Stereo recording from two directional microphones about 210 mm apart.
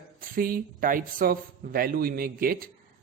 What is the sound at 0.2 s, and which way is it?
A man's voice, 40° right (ahead or behind).